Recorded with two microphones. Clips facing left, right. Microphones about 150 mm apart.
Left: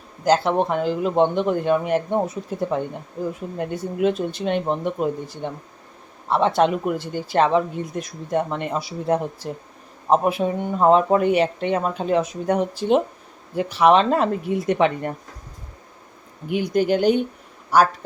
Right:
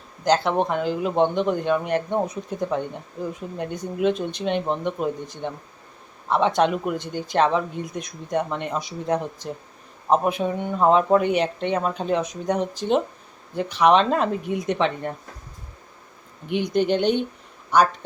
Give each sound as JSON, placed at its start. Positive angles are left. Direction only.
{"t": 0.3, "sound": "speech", "side_deg": 5}
{"t": 16.5, "sound": "speech", "side_deg": 5}